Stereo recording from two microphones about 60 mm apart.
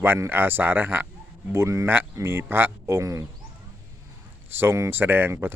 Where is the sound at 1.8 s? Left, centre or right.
Right.